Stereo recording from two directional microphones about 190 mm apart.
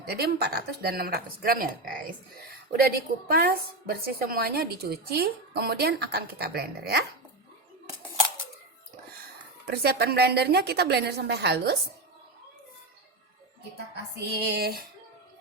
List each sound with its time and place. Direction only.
0.0 s a woman's voice: 55° right (ahead or behind)
3.2 s a woman's voice: 50° right (ahead or behind)
9.6 s a woman's voice: 55° right (ahead or behind)
13.9 s a woman's voice: 60° right (ahead or behind)